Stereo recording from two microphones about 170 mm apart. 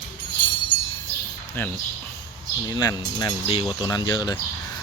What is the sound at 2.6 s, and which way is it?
Speech, 25° left (ahead or behind).